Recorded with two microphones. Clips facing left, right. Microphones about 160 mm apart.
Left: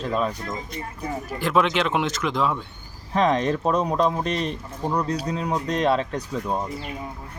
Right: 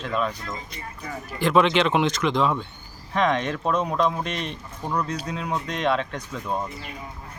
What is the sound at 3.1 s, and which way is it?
Speech, 35° left (ahead or behind).